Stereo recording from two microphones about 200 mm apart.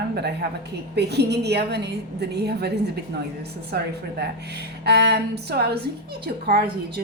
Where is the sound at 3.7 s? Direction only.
55° right (ahead or behind).